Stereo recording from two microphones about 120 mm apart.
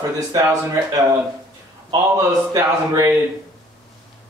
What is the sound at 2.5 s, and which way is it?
Speech, 30° right (ahead or behind).